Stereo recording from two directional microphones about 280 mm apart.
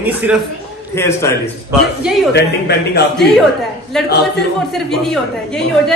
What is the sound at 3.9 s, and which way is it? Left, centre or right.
A woman's voice, centre.